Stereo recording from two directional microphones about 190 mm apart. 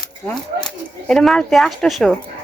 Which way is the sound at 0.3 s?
5° left (ahead or behind).